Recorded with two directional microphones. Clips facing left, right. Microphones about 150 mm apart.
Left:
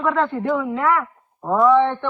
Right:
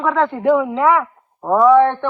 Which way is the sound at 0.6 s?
20° right (ahead or behind).